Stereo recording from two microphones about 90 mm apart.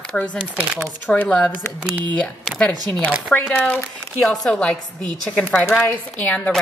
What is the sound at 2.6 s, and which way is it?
Speech, 10° left (ahead or behind).